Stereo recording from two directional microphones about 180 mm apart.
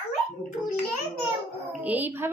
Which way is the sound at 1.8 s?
10° right (ahead or behind).